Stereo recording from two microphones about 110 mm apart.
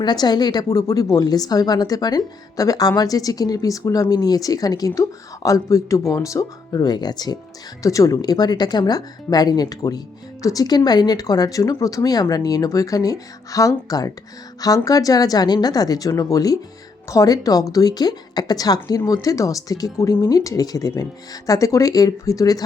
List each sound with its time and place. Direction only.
0.0 s a woman's voice: 40° left (ahead or behind)